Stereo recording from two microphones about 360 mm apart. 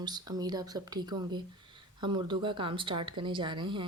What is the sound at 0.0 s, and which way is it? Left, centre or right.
Speech, centre.